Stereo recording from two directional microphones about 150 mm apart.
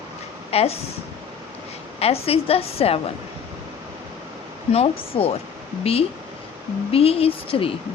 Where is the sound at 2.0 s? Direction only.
40° left (ahead or behind).